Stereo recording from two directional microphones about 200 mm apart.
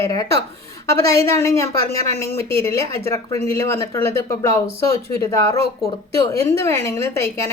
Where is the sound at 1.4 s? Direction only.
15° left (ahead or behind).